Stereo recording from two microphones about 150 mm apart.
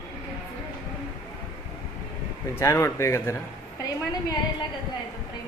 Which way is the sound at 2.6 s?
20° left (ahead or behind).